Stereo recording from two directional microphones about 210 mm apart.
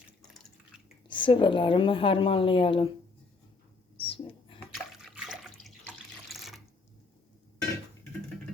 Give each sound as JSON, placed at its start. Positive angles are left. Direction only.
{"t": 1.0, "sound": "a woman's voice", "side_deg": 20}
{"t": 3.9, "sound": "a sound", "side_deg": 25}
{"t": 4.7, "sound": "water", "side_deg": -5}